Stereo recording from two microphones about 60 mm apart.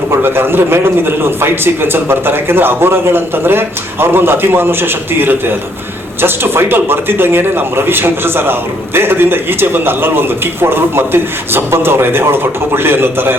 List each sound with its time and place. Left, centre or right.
0.2 s speech: right